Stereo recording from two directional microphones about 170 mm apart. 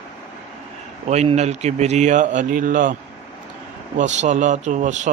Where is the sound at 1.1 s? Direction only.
40° right (ahead or behind).